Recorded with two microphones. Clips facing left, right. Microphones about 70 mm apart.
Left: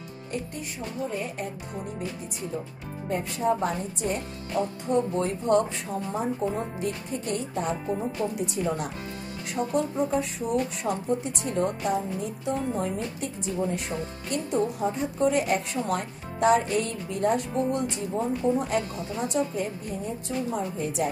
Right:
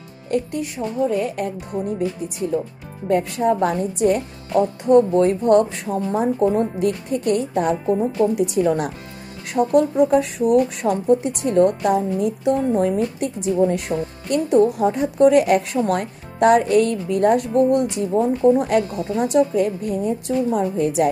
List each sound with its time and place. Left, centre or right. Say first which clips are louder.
0.3 s speech: right 12 dB; right
3.1 s a woman's voice: right 8 dB; right